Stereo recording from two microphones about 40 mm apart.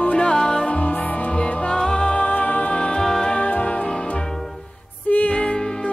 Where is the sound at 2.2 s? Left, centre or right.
Left.